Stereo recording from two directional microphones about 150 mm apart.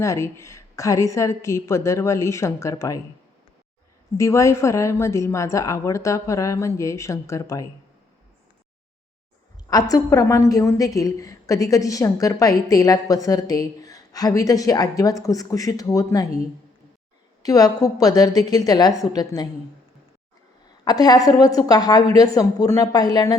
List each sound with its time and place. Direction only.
0.0 s a woman's voice: 20° left (ahead or behind)
4.2 s a woman's voice: 20° left (ahead or behind)
9.6 s a woman's voice: 25° left (ahead or behind)
17.4 s a woman's voice: 25° left (ahead or behind)
20.8 s a woman's voice: 25° left (ahead or behind)